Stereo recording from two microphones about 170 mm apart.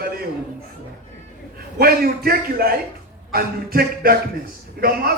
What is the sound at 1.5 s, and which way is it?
A man's voice, 60° right (ahead or behind).